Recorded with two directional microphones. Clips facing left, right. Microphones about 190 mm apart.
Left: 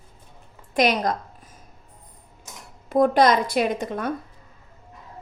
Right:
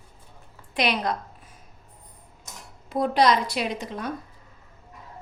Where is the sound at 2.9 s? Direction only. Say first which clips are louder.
Left 4 dB; 50° left (ahead or behind).